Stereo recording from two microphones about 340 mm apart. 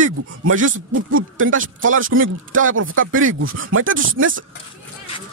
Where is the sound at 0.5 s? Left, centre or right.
Right.